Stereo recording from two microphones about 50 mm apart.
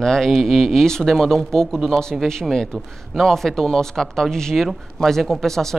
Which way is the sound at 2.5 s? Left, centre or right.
Centre.